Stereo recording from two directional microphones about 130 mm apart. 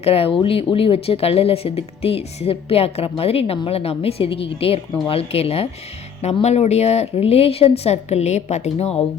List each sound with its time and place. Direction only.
0.0 s speech: 45° left (ahead or behind)